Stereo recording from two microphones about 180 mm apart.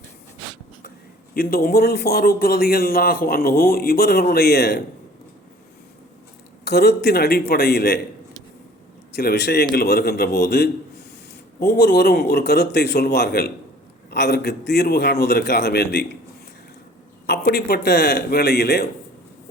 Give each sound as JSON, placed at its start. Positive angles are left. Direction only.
{"t": 1.3, "sound": "a man's voice", "side_deg": 55}
{"t": 6.7, "sound": "a man's voice", "side_deg": 65}
{"t": 9.1, "sound": "a man's voice", "side_deg": 65}
{"t": 17.2, "sound": "a man's voice", "side_deg": 60}